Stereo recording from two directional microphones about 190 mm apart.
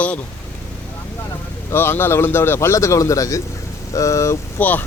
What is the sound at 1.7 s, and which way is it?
A man's voice, 10° left (ahead or behind).